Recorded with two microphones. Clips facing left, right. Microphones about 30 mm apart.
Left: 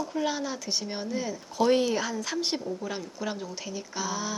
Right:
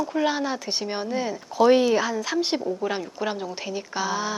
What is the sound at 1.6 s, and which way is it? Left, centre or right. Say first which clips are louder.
Speech: right 6 dB; centre.